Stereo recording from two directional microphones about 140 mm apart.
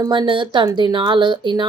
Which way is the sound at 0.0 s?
35° right (ahead or behind).